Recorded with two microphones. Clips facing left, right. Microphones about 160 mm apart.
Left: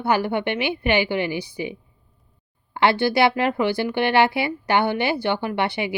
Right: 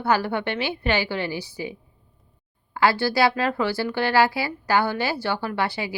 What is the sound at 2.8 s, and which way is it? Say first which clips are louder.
Speech: left 2 dB; 20° left (ahead or behind).